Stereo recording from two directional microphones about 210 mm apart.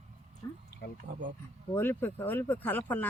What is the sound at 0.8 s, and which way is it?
Speech, 55° left (ahead or behind).